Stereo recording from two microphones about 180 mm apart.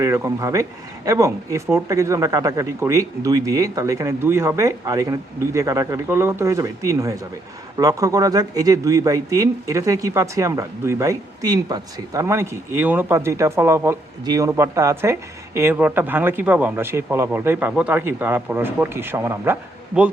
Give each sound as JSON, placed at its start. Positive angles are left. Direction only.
{"t": 0.0, "sound": "speech", "side_deg": -15}